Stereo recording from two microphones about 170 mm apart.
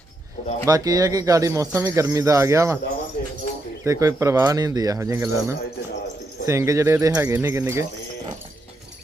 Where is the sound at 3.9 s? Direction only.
20° right (ahead or behind).